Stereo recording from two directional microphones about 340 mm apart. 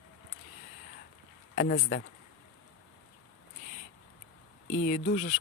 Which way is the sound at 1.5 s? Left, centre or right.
Left.